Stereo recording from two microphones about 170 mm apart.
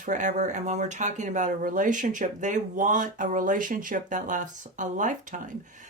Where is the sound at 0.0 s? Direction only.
45° right (ahead or behind).